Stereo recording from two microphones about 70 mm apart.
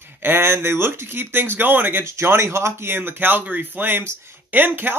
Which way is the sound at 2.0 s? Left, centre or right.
Right.